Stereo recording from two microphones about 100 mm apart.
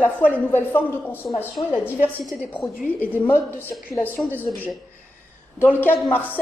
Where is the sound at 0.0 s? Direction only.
20° left (ahead or behind).